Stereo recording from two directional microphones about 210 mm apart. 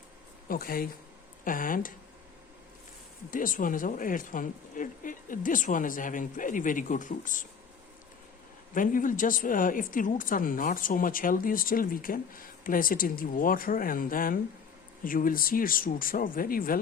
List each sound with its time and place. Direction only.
0.4 s a woman's voice: 45° left (ahead or behind)
3.2 s a woman's voice: 40° left (ahead or behind)
8.7 s a woman's voice: 40° left (ahead or behind)